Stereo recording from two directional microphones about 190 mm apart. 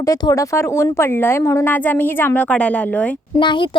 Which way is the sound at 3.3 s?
25° left (ahead or behind).